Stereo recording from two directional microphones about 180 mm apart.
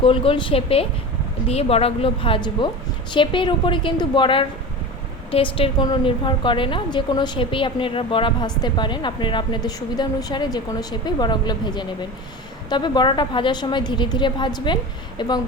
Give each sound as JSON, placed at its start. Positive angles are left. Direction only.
{"t": 0.0, "sound": "a woman's voice", "side_deg": 30}